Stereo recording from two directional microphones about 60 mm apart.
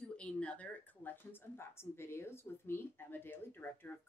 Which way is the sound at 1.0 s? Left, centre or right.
Left.